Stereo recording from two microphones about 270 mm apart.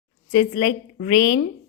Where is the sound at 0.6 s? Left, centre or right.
Left.